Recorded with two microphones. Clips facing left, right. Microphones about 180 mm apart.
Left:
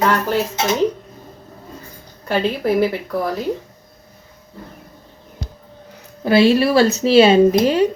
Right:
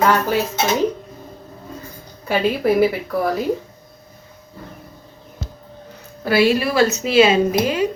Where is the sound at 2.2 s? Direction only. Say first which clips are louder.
Right 1 dB; 5° right (ahead or behind).